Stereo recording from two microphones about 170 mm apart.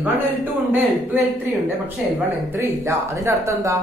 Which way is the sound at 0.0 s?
10° right (ahead or behind).